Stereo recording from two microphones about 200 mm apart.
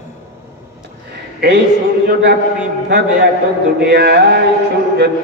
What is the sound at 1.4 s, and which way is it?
Speech, 55° right (ahead or behind).